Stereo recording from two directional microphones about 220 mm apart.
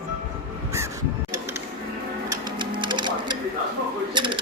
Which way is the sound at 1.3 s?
10° right (ahead or behind).